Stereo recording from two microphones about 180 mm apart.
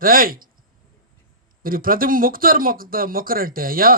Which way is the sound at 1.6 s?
50° right (ahead or behind).